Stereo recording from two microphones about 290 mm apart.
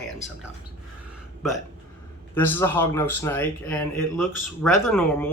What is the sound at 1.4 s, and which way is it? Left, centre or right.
Speech, centre.